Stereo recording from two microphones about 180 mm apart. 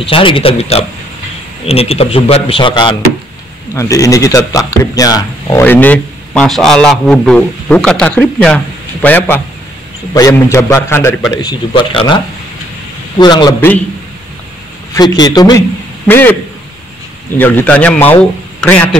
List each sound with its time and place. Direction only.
0.0 s a man's voice: 30° left (ahead or behind)
13.2 s a man's voice: 25° left (ahead or behind)
15.0 s a man's voice: 20° left (ahead or behind)
16.1 s a man's voice: 10° left (ahead or behind)
17.4 s a man's voice: 10° left (ahead or behind)